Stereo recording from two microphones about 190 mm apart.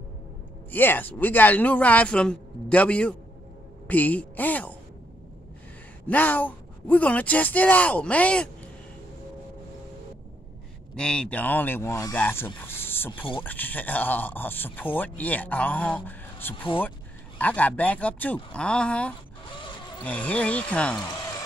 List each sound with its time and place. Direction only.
0.7 s a woman's voice: 10° left (ahead or behind)
6.0 s speech: 10° left (ahead or behind)
11.0 s speech: 5° left (ahead or behind)
19.4 s a sound: 25° left (ahead or behind)
20.0 s speech: 5° left (ahead or behind)